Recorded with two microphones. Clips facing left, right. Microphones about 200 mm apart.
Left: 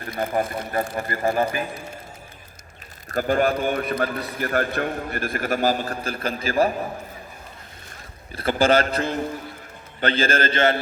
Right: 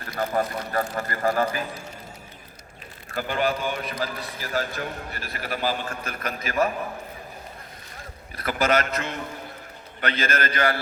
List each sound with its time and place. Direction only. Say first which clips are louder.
0.2 s speech: left 1 dB; 25° left (ahead or behind)
3.1 s a man's voice: left 5 dB; 45° left (ahead or behind)
8.4 s a man's voice: left 4 dB; 30° left (ahead or behind)